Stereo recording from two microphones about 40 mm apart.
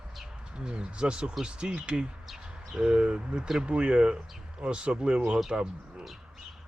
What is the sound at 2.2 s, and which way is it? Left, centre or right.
Bird, centre.